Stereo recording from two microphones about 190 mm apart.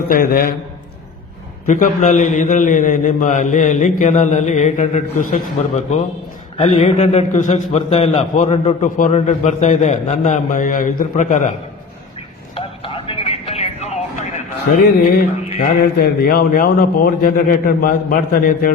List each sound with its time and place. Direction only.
0.1 s a man's voice: 45° left (ahead or behind)
1.6 s a man's voice: 40° left (ahead or behind)
12.5 s music: 30° left (ahead or behind)
14.8 s a man's voice: 50° left (ahead or behind)